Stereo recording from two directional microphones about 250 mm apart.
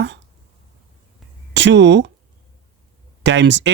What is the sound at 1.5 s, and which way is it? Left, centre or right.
Speech, right.